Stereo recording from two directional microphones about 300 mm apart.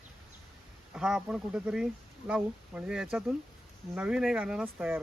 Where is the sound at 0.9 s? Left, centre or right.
Centre.